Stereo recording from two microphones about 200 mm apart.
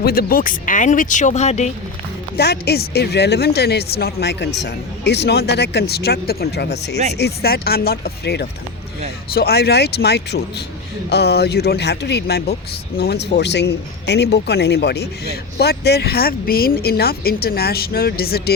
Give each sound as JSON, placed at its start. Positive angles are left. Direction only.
{"t": 0.0, "sound": "speech", "side_deg": 50}
{"t": 2.4, "sound": "speech", "side_deg": 55}